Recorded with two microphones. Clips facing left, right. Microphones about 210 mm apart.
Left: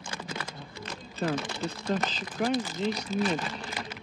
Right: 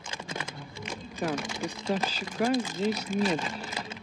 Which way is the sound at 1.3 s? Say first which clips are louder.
Even; 10° right (ahead or behind).